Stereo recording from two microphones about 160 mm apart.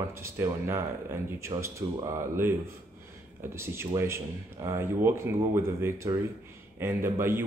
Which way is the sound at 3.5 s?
15° right (ahead or behind).